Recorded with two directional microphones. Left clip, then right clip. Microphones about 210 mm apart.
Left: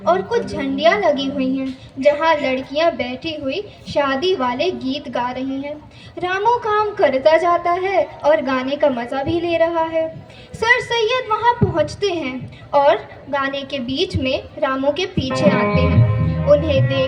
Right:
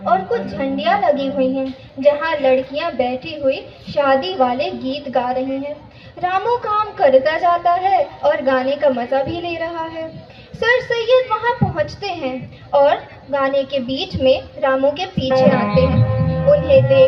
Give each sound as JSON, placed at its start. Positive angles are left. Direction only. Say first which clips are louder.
{"t": 0.0, "sound": "a woman's voice", "louder": "even", "side_deg": 50}